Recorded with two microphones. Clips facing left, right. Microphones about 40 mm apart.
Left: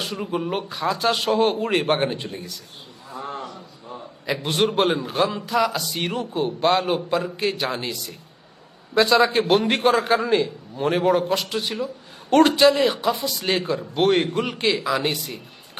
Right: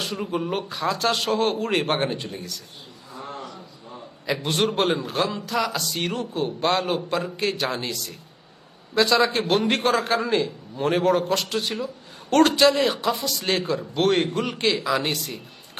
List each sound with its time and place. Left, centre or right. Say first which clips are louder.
0.0 s a man's voice: left 1 dB; centre
3.9 s a man's voice: even; centre